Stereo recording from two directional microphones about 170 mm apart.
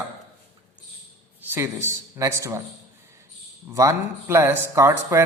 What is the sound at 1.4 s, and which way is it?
A man's voice, 15° right (ahead or behind).